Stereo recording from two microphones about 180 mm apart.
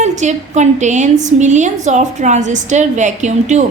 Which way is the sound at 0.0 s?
40° right (ahead or behind).